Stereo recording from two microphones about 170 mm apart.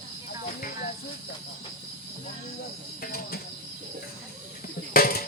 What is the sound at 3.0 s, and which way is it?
Cricket, 60° left (ahead or behind).